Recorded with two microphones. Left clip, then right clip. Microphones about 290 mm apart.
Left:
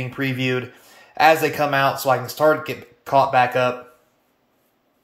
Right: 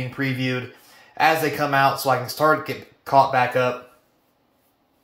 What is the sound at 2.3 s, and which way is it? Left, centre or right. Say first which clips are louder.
Speech: left 1 dB; centre.